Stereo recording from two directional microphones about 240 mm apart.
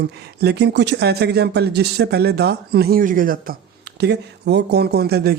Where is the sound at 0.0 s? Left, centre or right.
Right.